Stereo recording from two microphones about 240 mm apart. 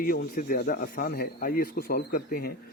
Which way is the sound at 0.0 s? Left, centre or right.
Left.